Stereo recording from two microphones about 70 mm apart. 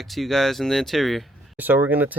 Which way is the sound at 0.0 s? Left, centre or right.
Centre.